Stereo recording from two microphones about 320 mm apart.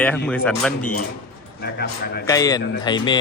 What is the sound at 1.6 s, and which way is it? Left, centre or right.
Speech, left.